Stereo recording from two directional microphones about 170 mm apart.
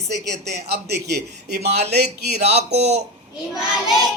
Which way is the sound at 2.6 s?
40° right (ahead or behind).